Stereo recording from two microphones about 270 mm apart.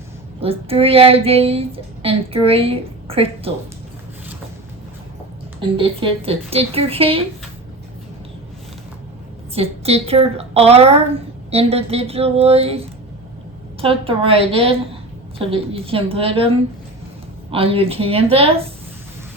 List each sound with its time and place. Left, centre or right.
0.3 s a woman's voice: right
5.5 s a woman's voice: centre
9.6 s a woman's voice: right
13.8 s a woman's voice: right